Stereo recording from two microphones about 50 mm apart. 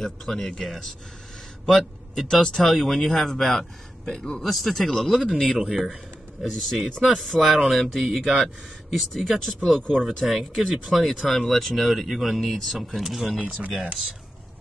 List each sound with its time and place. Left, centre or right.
0.0 s speech: centre
1.7 s speech: centre
4.4 s speech: centre
5.1 s speech: centre
10.2 s speech: centre